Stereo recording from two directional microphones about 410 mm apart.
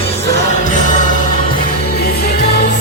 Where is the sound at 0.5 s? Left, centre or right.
Centre.